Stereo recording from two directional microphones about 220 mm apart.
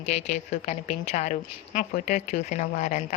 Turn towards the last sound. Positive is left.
turn(degrees=30)  # may be behind; listen again after turning